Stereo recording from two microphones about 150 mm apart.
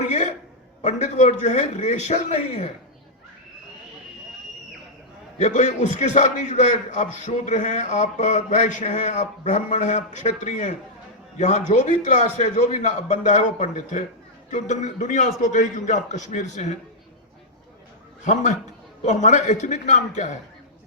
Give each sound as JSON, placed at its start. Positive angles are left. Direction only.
{"t": 0.1, "sound": "a sound", "side_deg": 55}
{"t": 0.8, "sound": "a man's voice", "side_deg": 50}
{"t": 5.4, "sound": "a man's voice", "side_deg": 55}
{"t": 19.0, "sound": "a man's voice", "side_deg": 50}